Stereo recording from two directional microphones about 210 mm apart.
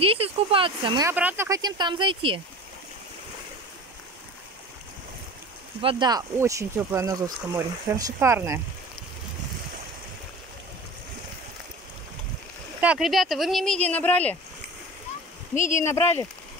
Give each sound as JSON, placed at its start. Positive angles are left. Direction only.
{"t": 0.0, "sound": "speech", "side_deg": -25}
{"t": 1.1, "sound": "speech", "side_deg": -10}
{"t": 5.8, "sound": "speech", "side_deg": -25}
{"t": 12.8, "sound": "speech", "side_deg": -5}
{"t": 15.5, "sound": "speech", "side_deg": 35}
{"t": 15.8, "sound": "speech", "side_deg": 15}